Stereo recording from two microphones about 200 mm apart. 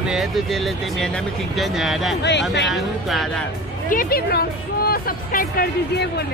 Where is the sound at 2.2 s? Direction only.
60° left (ahead or behind).